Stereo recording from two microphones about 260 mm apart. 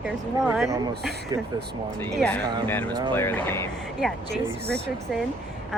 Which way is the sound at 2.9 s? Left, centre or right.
Centre.